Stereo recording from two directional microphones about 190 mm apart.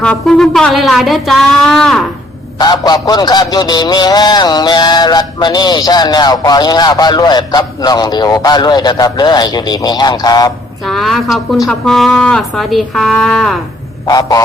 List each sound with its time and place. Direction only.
0.0 s a woman's voice: 5° left (ahead or behind)
2.6 s a man's voice: 20° left (ahead or behind)
10.8 s a woman's voice: centre (ahead or behind)
14.1 s a man's voice: 20° left (ahead or behind)